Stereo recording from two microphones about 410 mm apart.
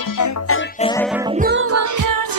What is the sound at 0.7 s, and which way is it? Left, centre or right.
Music, centre.